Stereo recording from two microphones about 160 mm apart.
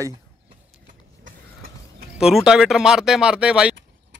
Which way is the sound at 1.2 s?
65° right (ahead or behind).